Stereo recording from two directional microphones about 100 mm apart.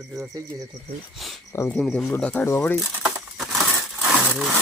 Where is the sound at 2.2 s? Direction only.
15° left (ahead or behind).